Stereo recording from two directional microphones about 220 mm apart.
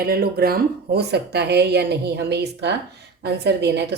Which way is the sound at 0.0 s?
45° right (ahead or behind).